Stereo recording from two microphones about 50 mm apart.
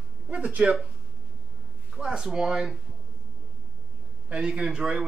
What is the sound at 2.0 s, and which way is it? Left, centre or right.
Speech, centre.